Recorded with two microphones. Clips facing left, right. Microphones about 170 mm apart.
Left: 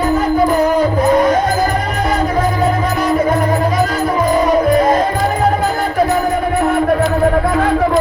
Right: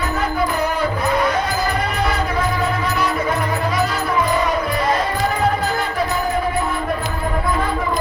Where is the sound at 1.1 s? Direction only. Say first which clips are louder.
Left 7 dB; 45° left (ahead or behind).